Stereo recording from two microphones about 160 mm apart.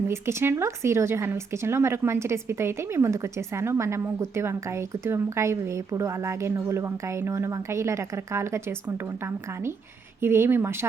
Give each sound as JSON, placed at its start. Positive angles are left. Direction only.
{"t": 0.1, "sound": "speech", "side_deg": -15}